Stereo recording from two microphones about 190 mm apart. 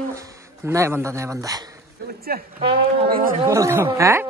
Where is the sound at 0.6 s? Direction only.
15° right (ahead or behind).